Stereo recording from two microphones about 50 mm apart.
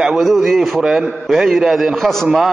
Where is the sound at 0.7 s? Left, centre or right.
Centre.